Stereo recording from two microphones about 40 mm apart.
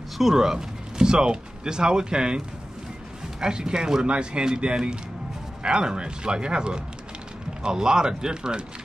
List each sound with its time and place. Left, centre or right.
0.2 s speech: centre